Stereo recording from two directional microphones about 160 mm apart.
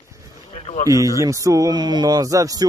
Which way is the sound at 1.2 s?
20° right (ahead or behind).